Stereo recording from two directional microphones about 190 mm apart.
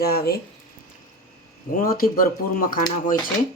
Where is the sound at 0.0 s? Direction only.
55° left (ahead or behind).